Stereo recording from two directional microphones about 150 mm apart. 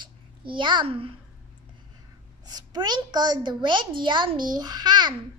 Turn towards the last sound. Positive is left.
turn(degrees=-30)  # may be behind; listen again after turning